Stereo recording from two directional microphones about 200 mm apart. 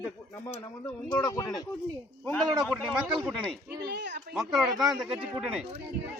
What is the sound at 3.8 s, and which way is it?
Speech, 60° right (ahead or behind).